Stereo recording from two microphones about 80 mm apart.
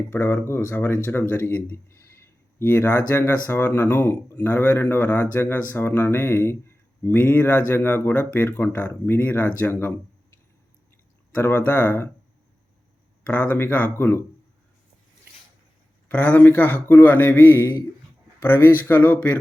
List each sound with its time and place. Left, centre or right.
0.1 s speech: left
11.3 s speech: left
13.2 s speech: centre
16.0 s speech: centre